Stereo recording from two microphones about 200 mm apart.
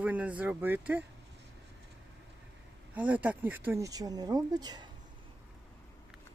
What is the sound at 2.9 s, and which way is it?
Speech, 10° right (ahead or behind).